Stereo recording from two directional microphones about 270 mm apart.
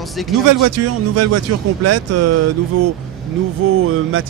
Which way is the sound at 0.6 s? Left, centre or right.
Right.